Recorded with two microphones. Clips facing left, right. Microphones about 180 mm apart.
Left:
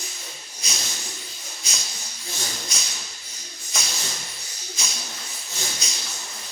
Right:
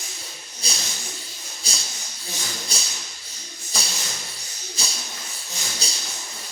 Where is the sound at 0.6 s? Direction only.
30° right (ahead or behind).